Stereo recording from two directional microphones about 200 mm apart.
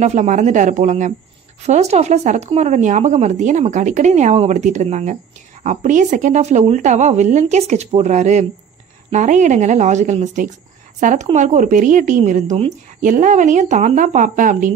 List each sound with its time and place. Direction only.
0.0 s speech: 35° right (ahead or behind)